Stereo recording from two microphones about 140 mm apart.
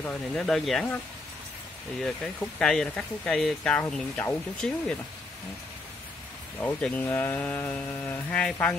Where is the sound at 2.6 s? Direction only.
5° left (ahead or behind).